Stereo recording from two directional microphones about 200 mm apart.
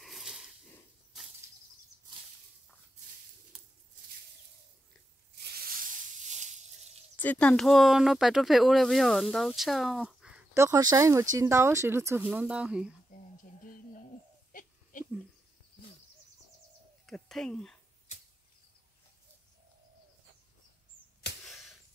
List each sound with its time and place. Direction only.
0.0 s a sound: centre (ahead or behind)
5.3 s snake: 55° right (ahead or behind); by 6.5 s 35° right (ahead or behind)
7.2 s speech: 5° left (ahead or behind)
14.5 s crying: 45° left (ahead or behind)
17.0 s bird: centre (ahead or behind)
21.5 s a sound: centre (ahead or behind)